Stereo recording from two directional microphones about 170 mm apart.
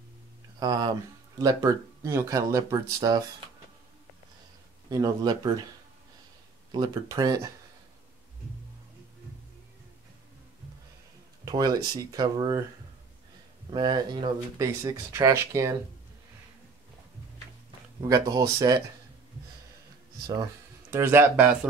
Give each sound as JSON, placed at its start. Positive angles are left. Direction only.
{"t": 0.6, "sound": "speech", "side_deg": -25}
{"t": 4.8, "sound": "speech", "side_deg": -20}
{"t": 6.7, "sound": "speech", "side_deg": -20}
{"t": 11.4, "sound": "speech", "side_deg": -25}
{"t": 13.7, "sound": "speech", "side_deg": -25}
{"t": 18.0, "sound": "speech", "side_deg": -20}
{"t": 20.9, "sound": "speech", "side_deg": -15}